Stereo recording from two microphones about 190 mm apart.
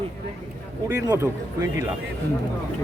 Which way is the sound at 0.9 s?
15° right (ahead or behind).